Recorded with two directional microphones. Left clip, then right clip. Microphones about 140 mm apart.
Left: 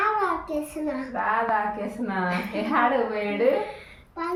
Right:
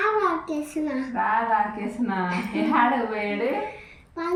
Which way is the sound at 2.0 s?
30° left (ahead or behind).